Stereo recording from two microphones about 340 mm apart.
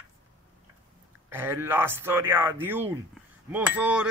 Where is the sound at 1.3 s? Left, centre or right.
Centre.